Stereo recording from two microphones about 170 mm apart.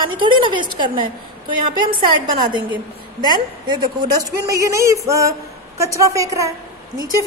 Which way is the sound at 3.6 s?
25° right (ahead or behind).